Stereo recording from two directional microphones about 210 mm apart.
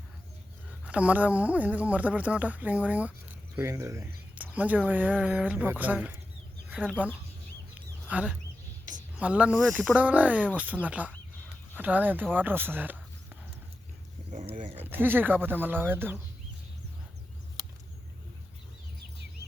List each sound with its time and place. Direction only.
0.9 s speech: 5° right (ahead or behind)
14.3 s speech: 35° right (ahead or behind)
14.8 s speech: 10° right (ahead or behind)
19.4 s cricket: 15° right (ahead or behind)